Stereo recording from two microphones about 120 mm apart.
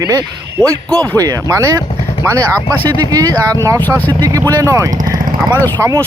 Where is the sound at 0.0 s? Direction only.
30° right (ahead or behind).